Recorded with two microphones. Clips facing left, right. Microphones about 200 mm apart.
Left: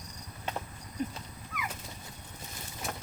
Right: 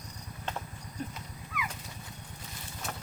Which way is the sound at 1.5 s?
45° left (ahead or behind).